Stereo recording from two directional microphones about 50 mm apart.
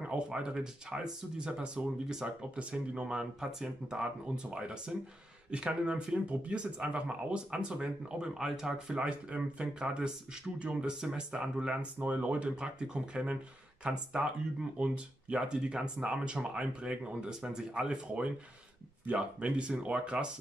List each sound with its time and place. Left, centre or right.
0.0 s speech: right
8.9 s speech: right
12.0 s speech: right